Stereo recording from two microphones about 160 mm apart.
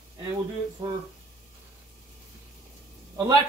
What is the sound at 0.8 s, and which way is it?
Speech, 30° right (ahead or behind).